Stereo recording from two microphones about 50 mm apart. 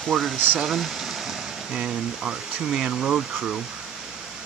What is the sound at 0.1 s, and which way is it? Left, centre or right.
Speech, centre.